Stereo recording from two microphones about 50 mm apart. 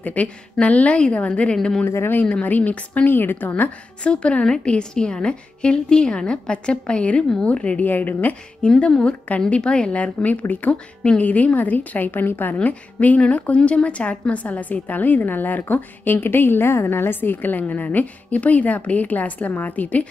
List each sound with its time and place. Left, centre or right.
0.0 s a woman's voice: left
2.4 s a woman's voice: left
3.1 s a woman's voice: left
4.0 s a woman's voice: left
7.8 s a woman's voice: left
8.6 s a woman's voice: centre